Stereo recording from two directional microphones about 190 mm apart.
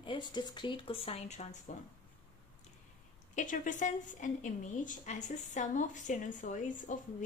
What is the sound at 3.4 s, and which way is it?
A woman's voice, 40° left (ahead or behind).